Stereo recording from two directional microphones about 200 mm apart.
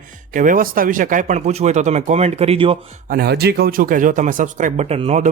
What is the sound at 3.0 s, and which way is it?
Speech, 50° right (ahead or behind).